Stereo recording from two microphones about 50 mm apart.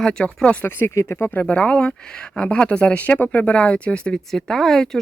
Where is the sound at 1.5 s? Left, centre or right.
Left.